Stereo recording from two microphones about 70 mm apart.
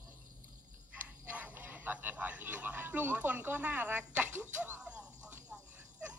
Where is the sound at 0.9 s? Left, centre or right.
Right.